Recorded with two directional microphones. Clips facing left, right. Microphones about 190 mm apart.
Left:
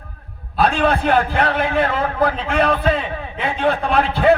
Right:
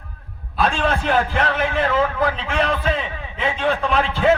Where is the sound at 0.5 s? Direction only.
60° left (ahead or behind).